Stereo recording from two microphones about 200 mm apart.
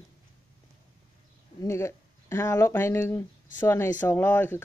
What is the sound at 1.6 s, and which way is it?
Speech, 15° left (ahead or behind).